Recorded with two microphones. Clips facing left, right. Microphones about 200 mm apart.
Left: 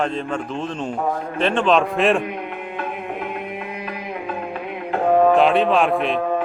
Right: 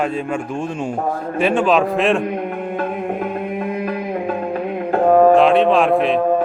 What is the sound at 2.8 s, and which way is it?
Music, 40° right (ahead or behind).